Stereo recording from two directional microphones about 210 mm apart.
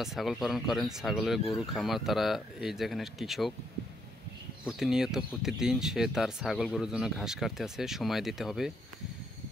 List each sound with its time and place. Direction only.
0.0 s speech: centre (ahead or behind)
4.6 s speech: centre (ahead or behind)